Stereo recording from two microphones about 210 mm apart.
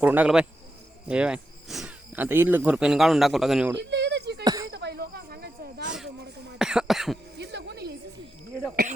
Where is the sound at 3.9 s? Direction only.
55° right (ahead or behind).